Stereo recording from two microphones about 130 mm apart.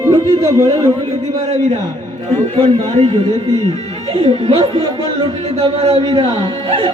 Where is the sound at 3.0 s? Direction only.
50° right (ahead or behind).